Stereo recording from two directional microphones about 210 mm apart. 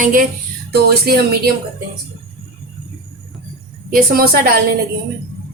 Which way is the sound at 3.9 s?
45° right (ahead or behind).